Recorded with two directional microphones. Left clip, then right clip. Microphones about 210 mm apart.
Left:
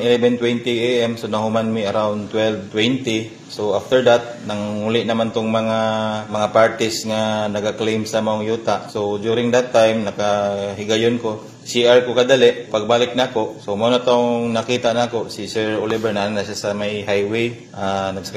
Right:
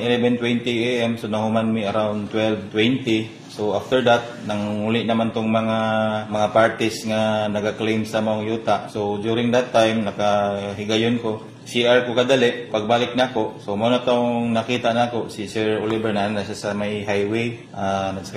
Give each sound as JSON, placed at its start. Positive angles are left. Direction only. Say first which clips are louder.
{"t": 0.0, "sound": "a man's voice", "louder": "left 4 dB", "side_deg": 40}